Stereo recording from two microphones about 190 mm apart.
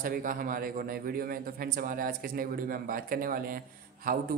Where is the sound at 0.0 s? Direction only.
45° right (ahead or behind).